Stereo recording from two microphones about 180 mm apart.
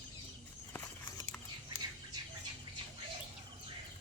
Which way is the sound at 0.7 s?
15° left (ahead or behind).